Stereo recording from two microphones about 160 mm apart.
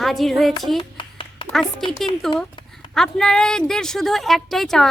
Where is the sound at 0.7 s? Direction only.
30° left (ahead or behind).